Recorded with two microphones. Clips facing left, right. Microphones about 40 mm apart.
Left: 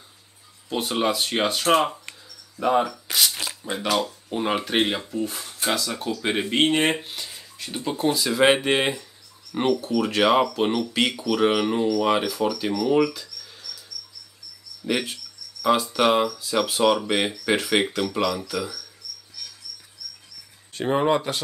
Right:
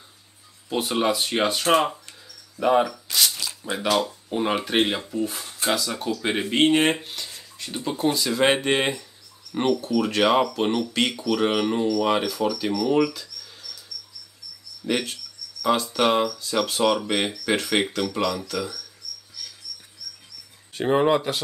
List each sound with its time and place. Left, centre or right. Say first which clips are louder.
0.7 s speech: right 1 dB; centre
3.4 s a sound: left 1 dB; left
4.3 s speech: even; centre
14.9 s speech: even; centre
20.7 s speech: right 1 dB; centre